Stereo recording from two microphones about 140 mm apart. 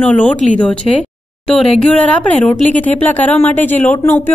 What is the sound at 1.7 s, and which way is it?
A woman's voice, 10° left (ahead or behind).